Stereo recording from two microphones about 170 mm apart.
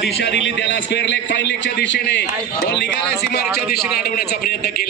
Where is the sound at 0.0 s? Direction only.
85° left.